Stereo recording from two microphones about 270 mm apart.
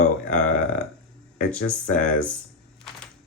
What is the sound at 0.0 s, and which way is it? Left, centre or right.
Burping, left.